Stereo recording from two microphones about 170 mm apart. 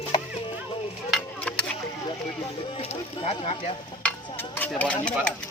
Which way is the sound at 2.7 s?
35° left (ahead or behind).